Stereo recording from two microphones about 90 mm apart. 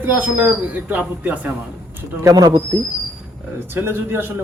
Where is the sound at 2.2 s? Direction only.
40° right (ahead or behind).